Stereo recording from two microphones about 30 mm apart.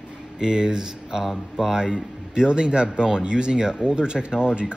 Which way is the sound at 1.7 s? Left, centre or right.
Right.